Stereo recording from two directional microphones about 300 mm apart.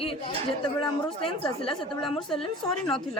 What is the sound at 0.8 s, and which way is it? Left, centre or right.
Speech, centre.